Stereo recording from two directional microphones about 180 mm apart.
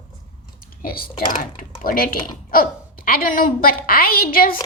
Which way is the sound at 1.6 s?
50° left (ahead or behind).